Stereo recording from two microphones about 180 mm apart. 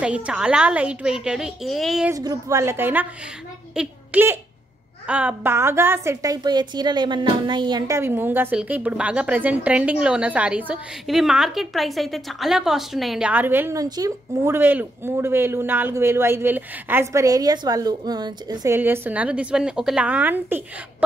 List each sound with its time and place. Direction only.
0.0 s a woman's voice: 5° right (ahead or behind)
2.0 s a woman's voice: 20° right (ahead or behind)
8.0 s a woman's voice: 10° right (ahead or behind)